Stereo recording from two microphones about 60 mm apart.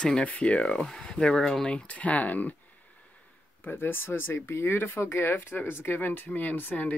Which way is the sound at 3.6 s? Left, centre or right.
Left.